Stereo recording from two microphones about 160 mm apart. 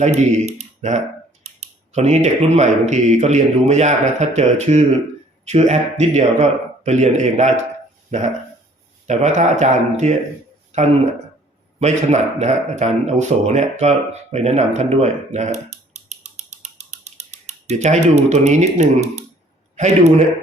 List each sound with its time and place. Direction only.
0.0 s speech: 45° right (ahead or behind)
9.0 s speech: 45° right (ahead or behind)
11.8 s a man's voice: 45° right (ahead or behind)